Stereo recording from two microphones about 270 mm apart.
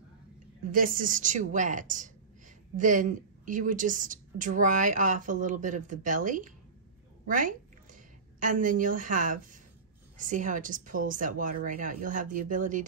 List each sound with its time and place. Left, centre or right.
0.7 s a woman's voice: right